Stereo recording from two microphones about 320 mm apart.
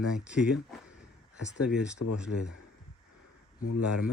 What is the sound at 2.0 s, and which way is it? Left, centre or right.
Speech, left.